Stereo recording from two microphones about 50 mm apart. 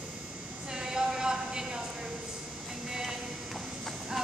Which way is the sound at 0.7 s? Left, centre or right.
Centre.